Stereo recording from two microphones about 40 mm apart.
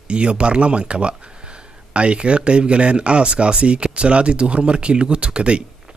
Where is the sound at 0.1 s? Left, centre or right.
Right.